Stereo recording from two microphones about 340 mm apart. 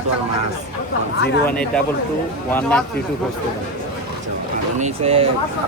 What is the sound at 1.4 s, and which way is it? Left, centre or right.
Speech, centre.